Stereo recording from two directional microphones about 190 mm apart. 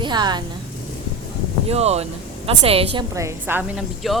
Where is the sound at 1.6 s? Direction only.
35° right (ahead or behind).